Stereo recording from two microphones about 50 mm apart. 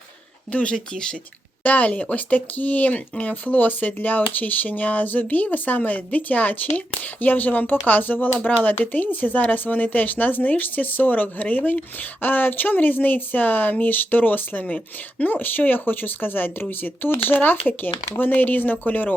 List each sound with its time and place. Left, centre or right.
0.5 s speech: centre